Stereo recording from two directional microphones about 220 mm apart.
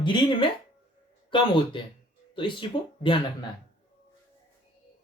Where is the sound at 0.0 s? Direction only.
20° left (ahead or behind).